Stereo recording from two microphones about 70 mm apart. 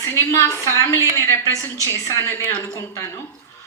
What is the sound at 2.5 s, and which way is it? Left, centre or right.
Speech, left.